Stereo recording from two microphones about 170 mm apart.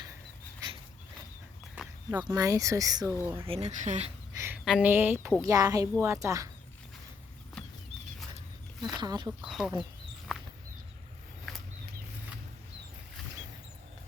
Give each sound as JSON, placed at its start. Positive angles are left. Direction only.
{"t": 2.0, "sound": "speech", "side_deg": -25}
{"t": 3.4, "sound": "speech", "side_deg": -35}
{"t": 4.4, "sound": "a sound", "side_deg": -15}
{"t": 4.6, "sound": "speech", "side_deg": -5}
{"t": 7.6, "sound": "horse", "side_deg": 5}
{"t": 9.0, "sound": "speech", "side_deg": -25}
{"t": 9.4, "sound": "speech", "side_deg": -5}
{"t": 11.5, "sound": "a sound", "side_deg": 0}